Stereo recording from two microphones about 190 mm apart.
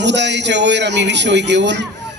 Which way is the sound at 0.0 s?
65° right (ahead or behind).